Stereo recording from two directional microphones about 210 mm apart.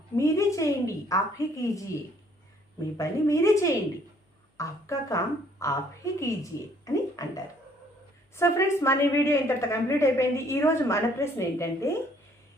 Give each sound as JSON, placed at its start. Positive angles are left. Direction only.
{"t": 0.2, "sound": "a woman's voice", "side_deg": 15}
{"t": 3.0, "sound": "a woman's voice", "side_deg": 15}